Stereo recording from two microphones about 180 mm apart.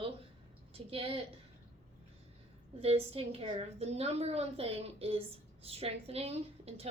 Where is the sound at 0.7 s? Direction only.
30° right (ahead or behind).